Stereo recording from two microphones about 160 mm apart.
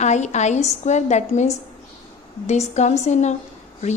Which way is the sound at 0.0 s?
45° left (ahead or behind).